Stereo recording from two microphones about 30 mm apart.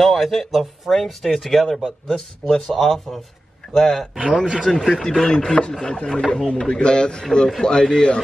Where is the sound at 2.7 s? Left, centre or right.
Centre.